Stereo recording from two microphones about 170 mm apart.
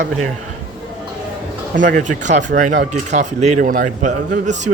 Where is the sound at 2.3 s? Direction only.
45° right (ahead or behind).